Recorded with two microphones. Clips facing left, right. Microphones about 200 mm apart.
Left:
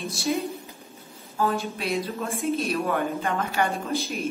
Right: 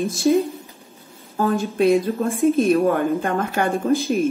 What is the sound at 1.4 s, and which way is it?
A woman's voice, 45° right (ahead or behind).